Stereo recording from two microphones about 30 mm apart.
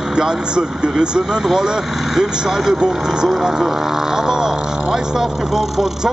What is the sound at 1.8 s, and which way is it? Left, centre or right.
Speech, centre.